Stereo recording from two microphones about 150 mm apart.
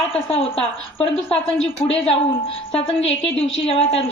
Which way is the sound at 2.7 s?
40° left (ahead or behind).